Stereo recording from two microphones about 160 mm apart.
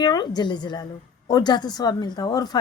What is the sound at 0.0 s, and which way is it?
Speech, 25° left (ahead or behind).